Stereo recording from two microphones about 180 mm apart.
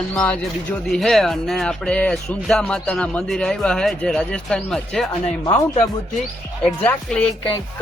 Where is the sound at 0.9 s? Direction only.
Centre (ahead or behind).